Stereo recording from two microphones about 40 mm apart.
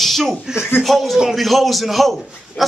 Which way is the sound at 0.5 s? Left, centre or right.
Left.